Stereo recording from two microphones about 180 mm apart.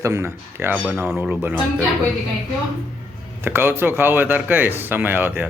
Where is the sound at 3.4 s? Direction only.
10° right (ahead or behind).